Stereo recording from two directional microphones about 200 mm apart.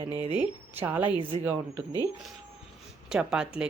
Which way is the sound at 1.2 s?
25° right (ahead or behind).